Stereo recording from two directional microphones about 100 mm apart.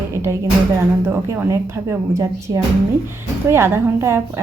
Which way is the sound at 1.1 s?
25° right (ahead or behind).